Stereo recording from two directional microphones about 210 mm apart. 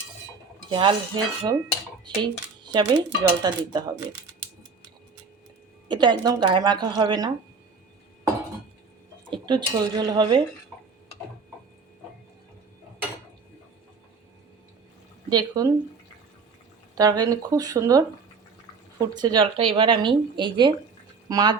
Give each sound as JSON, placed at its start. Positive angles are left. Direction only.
{"t": 0.7, "sound": "speech", "side_deg": -25}
{"t": 2.6, "sound": "speech", "side_deg": -20}
{"t": 5.9, "sound": "speech", "side_deg": -20}
{"t": 9.3, "sound": "speech", "side_deg": -20}
{"t": 15.3, "sound": "speech", "side_deg": -15}
{"t": 17.0, "sound": "speech", "side_deg": -15}